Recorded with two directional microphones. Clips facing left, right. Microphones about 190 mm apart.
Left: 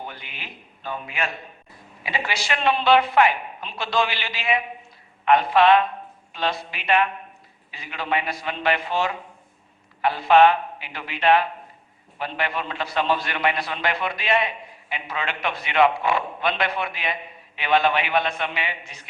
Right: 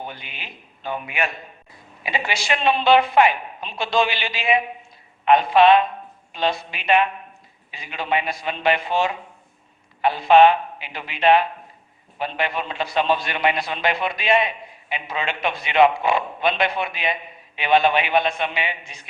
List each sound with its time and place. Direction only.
0.0 s a man's voice: 20° right (ahead or behind)
2.0 s a woman's voice: 20° right (ahead or behind)